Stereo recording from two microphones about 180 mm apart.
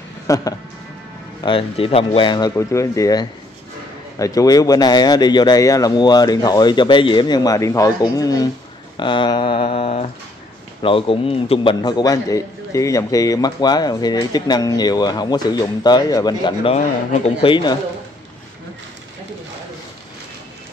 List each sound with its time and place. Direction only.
0.3 s a man's voice: 20° left (ahead or behind)
1.4 s a man's voice: 30° left (ahead or behind)